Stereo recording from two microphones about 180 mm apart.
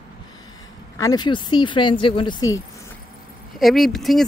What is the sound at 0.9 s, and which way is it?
Speech, 20° left (ahead or behind).